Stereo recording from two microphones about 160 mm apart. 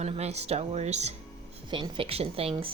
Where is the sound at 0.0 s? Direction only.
45° right (ahead or behind).